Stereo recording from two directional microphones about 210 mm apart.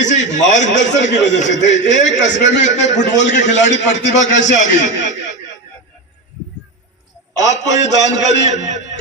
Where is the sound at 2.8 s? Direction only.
55° left (ahead or behind).